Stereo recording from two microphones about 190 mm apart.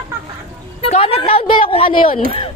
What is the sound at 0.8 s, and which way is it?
A woman's voice, 30° left (ahead or behind).